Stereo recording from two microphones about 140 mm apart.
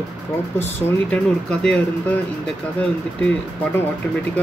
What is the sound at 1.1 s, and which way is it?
Speech, 10° left (ahead or behind).